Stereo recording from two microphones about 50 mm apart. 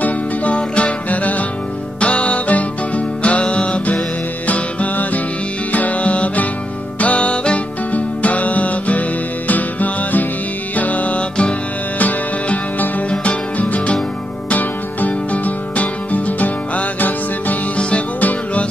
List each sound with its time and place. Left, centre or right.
0.0 s music: left
12.0 s music: left
13.1 s music: left
17.7 s music: left